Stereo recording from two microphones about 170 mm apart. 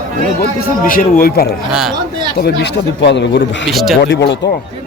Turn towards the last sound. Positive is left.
turn(degrees=90)